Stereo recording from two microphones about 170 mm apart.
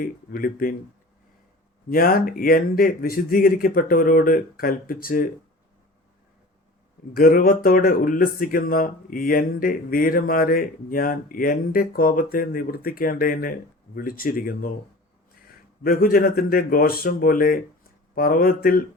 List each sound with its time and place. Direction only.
0.0 s speech: 55° left (ahead or behind)
1.9 s speech: 60° left (ahead or behind)
7.1 s speech: 55° left (ahead or behind)
15.8 s speech: 60° left (ahead or behind)